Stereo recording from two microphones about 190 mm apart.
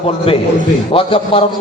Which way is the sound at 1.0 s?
30° left (ahead or behind).